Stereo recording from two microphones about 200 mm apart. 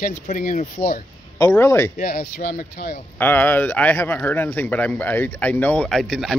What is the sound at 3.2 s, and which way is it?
Speech, 10° left (ahead or behind).